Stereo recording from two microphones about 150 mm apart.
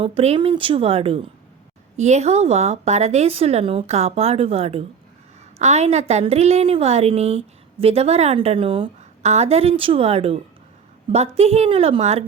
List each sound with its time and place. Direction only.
0.0 s a woman's voice: 40° right (ahead or behind)